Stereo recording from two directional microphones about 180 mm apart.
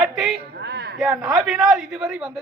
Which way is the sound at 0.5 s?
65° right (ahead or behind).